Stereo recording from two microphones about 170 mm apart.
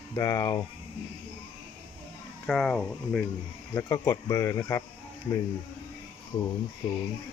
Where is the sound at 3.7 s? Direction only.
15° left (ahead or behind).